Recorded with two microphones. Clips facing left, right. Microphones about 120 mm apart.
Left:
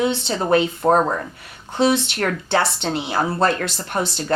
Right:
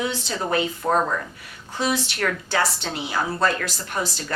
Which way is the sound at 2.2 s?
25° left (ahead or behind).